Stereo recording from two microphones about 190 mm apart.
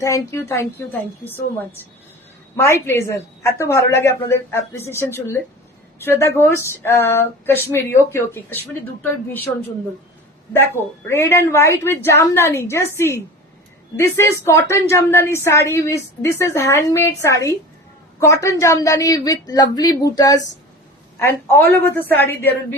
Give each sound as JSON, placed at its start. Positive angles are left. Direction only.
{"t": 0.0, "sound": "a woman's voice", "side_deg": 15}
{"t": 2.6, "sound": "a woman's voice", "side_deg": 15}
{"t": 11.1, "sound": "a woman's voice", "side_deg": 15}